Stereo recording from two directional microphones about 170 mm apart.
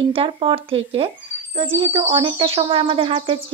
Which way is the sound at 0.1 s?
30° right (ahead or behind).